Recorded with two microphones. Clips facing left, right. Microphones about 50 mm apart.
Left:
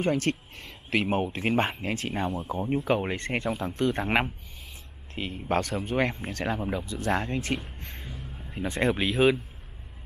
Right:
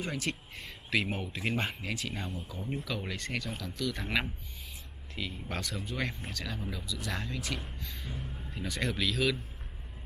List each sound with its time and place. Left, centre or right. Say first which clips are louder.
0.0 s speech: left 9 dB; left
2.4 s speech: left 11 dB; left
2.8 s speech: left 10 dB; left
7.8 s a sound: left 2 dB; left
8.5 s speech: left 8 dB; left